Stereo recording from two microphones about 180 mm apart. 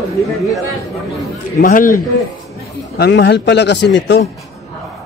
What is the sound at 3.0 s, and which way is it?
Speech, 70° left (ahead or behind).